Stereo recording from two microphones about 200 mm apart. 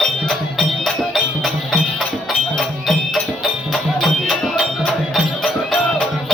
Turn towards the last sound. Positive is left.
turn(degrees=0)  # may be behind; listen again after turning